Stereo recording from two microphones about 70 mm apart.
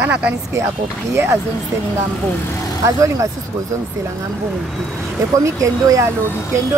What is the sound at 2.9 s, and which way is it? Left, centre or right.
Speech, right.